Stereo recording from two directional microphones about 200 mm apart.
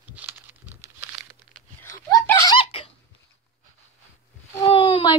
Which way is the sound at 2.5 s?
25° left (ahead or behind).